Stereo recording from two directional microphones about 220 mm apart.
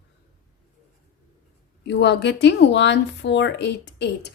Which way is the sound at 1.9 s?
50° left (ahead or behind).